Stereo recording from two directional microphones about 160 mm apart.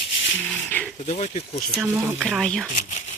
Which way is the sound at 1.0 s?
45° left (ahead or behind).